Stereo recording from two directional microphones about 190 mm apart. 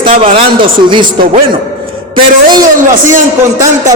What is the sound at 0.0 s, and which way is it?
A man's voice, 30° right (ahead or behind).